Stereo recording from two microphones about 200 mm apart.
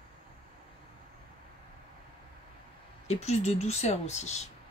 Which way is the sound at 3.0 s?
35° left (ahead or behind).